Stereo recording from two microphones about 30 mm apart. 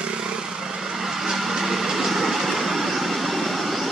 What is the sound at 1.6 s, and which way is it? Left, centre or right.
Vehicle, centre.